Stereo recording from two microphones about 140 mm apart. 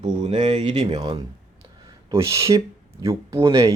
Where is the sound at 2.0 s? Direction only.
20° right (ahead or behind).